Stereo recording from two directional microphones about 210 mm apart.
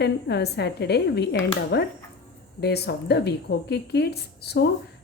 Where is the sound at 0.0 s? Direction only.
50° left (ahead or behind).